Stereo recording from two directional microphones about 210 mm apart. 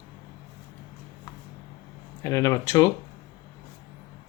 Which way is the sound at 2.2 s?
15° left (ahead or behind).